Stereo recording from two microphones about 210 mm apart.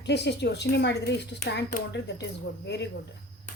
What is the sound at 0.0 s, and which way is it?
A woman's voice, 55° left (ahead or behind).